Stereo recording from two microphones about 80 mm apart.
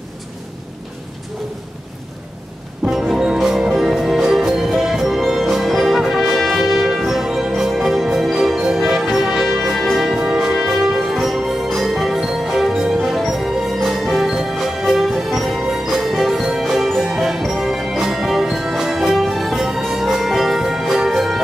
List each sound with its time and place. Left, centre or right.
2.9 s music: centre